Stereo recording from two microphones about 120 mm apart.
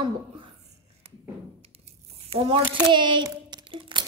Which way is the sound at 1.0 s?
60° right (ahead or behind).